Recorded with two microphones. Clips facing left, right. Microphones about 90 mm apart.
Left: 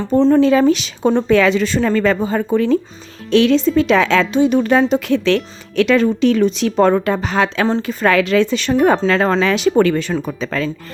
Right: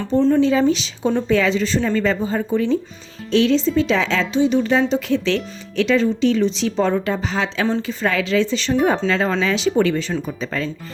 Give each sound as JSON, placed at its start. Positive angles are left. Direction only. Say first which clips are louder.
{"t": 0.3, "sound": "a woman's voice", "louder": "left 4 dB", "side_deg": 65}